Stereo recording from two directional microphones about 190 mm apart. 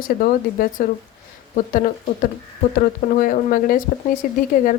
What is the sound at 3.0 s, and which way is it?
Speech, 45° left (ahead or behind).